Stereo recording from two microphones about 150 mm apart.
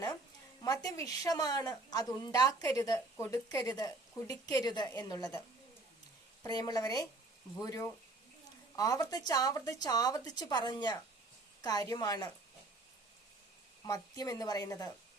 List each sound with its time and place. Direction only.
0.6 s a woman's voice: 25° left (ahead or behind)
6.4 s a woman's voice: 25° left (ahead or behind)
13.8 s a woman's voice: 25° left (ahead or behind)